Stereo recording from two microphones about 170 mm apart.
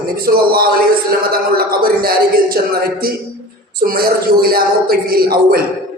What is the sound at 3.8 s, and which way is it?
A man's voice, 60° right (ahead or behind).